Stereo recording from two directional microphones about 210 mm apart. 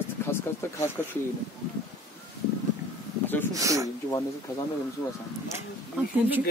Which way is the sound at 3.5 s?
15° right (ahead or behind).